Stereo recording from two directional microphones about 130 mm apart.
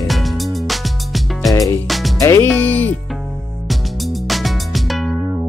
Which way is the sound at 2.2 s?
25° left (ahead or behind).